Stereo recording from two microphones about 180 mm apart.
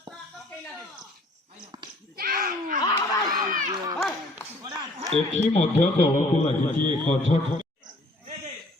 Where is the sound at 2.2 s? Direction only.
55° right (ahead or behind).